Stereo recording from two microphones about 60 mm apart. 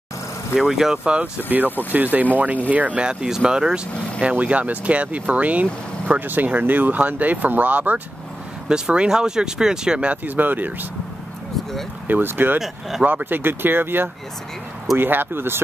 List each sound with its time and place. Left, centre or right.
0.6 s speech: centre
0.9 s speech: centre
1.9 s speech: right
8.6 s speech: centre
10.2 s speech: right
12.1 s speech: right
12.5 s speech: centre
13.0 s speech: right